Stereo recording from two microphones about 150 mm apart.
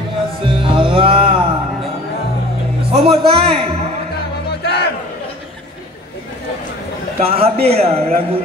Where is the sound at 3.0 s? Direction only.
35° right (ahead or behind).